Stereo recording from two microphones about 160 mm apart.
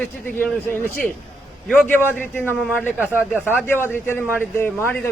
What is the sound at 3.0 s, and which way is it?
Speech, 10° right (ahead or behind).